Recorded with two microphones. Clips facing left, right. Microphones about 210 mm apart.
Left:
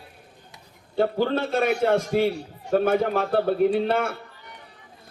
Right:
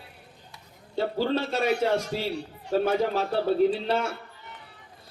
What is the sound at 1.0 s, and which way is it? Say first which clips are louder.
A man's voice: left 3 dB; 55° left (ahead or behind).